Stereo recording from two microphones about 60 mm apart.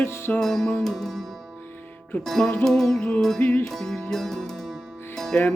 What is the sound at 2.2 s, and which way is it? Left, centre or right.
Speech, centre.